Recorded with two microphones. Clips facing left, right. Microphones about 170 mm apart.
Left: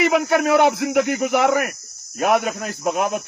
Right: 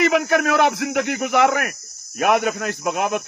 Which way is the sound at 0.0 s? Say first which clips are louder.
Even; 90° right.